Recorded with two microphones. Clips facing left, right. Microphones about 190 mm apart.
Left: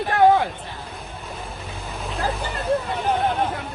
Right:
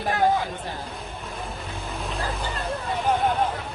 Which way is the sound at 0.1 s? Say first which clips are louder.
Left 7 dB; 60° left (ahead or behind).